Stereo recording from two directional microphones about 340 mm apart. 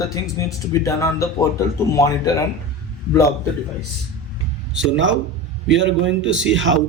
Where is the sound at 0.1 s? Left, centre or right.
Centre.